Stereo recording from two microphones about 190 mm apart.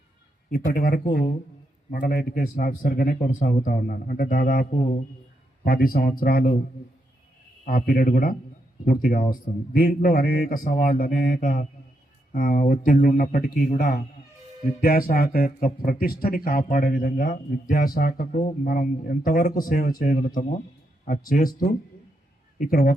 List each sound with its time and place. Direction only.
0.5 s speech: 50° left (ahead or behind)
5.6 s speech: 50° left (ahead or behind)
7.6 s speech: 45° left (ahead or behind)